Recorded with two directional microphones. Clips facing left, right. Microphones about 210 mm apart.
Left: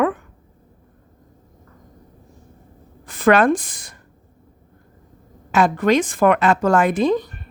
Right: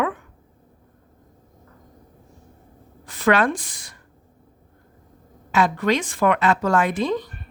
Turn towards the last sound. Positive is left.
turn(degrees=45)  # may be behind; listen again after turning